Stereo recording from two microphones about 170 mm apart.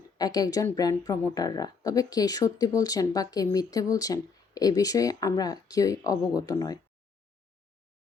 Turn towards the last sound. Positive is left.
turn(degrees=20)  # may be behind; listen again after turning